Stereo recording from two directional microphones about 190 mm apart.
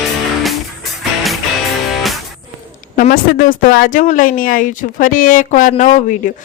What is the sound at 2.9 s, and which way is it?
Speech, 45° left (ahead or behind).